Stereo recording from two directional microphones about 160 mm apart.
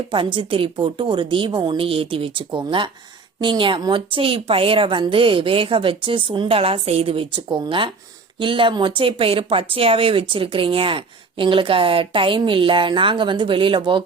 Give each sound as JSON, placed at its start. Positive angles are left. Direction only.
{"t": 0.1, "sound": "speech", "side_deg": -30}